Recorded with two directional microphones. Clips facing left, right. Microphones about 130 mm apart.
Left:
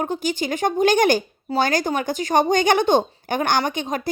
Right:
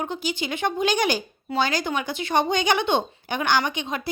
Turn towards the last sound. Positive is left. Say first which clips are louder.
# left 2 dB
turn(degrees=45)  # may be behind; listen again after turning